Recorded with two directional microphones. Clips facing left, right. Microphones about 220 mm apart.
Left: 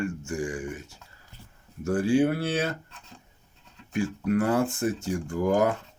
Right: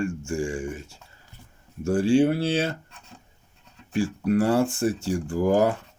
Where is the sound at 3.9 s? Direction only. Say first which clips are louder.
Right 3 dB; 30° right (ahead or behind).